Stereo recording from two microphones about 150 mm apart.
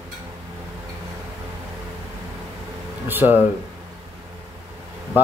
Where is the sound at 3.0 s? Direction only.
15° right (ahead or behind).